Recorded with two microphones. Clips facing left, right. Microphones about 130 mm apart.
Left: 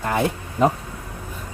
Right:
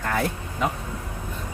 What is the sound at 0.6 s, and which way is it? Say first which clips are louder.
Speech: left 8 dB; 40° left (ahead or behind).